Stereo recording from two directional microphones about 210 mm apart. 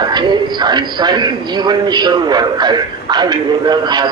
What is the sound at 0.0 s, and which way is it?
A man's voice, 20° right (ahead or behind).